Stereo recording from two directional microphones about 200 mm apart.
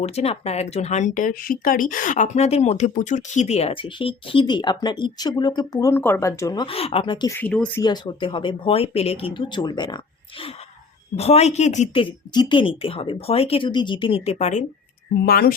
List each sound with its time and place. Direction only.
0.0 s speech: 30° left (ahead or behind)
7.3 s speech: 5° left (ahead or behind)
7.8 s speech: 20° left (ahead or behind)
12.3 s speech: 20° left (ahead or behind)
15.2 s speech: 50° left (ahead or behind)